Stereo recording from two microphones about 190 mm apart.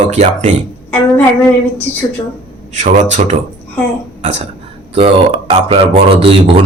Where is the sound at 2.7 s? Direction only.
40° right (ahead or behind).